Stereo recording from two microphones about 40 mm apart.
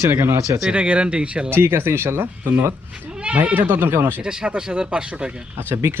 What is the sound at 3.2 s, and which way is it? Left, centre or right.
Speech, right.